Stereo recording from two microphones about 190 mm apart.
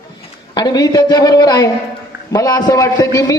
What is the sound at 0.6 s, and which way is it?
A man's voice, 20° left (ahead or behind).